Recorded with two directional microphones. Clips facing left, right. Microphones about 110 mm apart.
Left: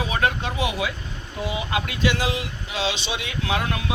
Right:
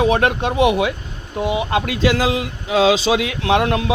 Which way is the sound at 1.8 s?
85° right.